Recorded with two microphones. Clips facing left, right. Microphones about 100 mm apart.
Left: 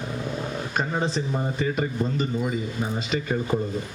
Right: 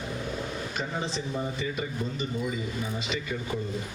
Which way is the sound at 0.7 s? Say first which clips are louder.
Left 9 dB; 45° left (ahead or behind).